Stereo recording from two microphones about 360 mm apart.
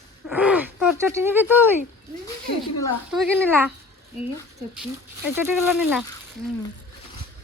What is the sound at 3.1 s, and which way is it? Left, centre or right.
Speech, centre.